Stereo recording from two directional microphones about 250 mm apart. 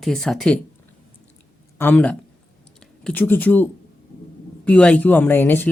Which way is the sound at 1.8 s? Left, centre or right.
Centre.